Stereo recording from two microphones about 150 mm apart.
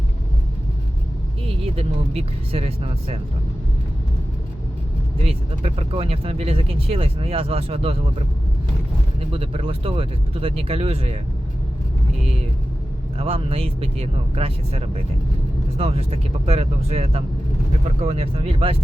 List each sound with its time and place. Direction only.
1.5 s speech: 40° right (ahead or behind)
5.2 s speech: 40° right (ahead or behind)
9.3 s speech: 40° right (ahead or behind)
13.1 s speech: 40° right (ahead or behind)